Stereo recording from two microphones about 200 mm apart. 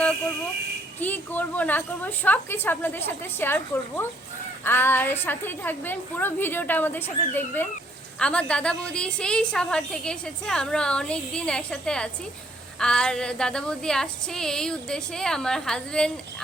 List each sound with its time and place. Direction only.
0.9 s a woman's voice: 10° left (ahead or behind)